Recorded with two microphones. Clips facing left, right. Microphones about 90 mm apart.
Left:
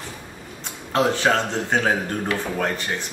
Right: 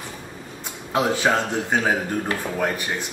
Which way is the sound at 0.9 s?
10° right (ahead or behind).